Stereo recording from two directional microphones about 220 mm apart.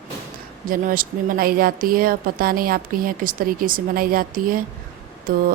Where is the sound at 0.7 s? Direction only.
40° right (ahead or behind).